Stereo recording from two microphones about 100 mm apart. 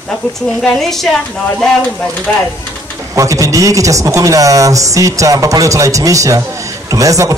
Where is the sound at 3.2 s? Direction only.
30° right (ahead or behind).